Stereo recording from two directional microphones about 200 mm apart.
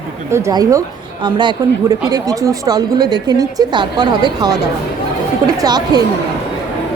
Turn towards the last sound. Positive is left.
turn(degrees=-20)  # may be behind; listen again after turning